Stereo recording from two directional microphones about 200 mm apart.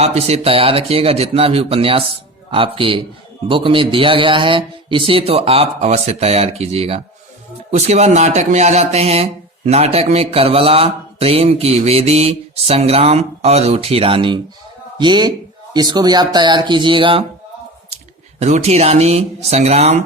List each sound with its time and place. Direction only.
0.0 s a man's voice: 30° right (ahead or behind)
18.3 s speech: 35° right (ahead or behind)